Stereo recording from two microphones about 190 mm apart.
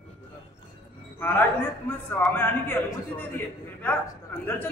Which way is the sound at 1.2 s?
10° left (ahead or behind).